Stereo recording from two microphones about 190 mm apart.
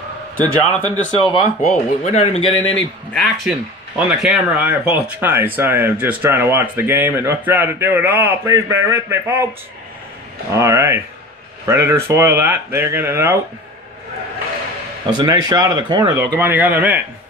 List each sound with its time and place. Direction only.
0.4 s a man's voice: 10° left (ahead or behind)
1.6 s speech: 40° left (ahead or behind)
2.7 s speech: 5° left (ahead or behind); by 9.4 s 15° right (ahead or behind)
10.5 s speech: 15° right (ahead or behind)
15.0 s speech: 20° right (ahead or behind)
16.3 s speech: 10° right (ahead or behind)